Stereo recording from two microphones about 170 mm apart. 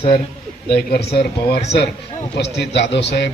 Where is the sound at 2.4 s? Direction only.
90° left.